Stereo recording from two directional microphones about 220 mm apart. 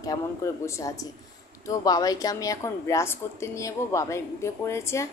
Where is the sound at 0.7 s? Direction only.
15° left (ahead or behind).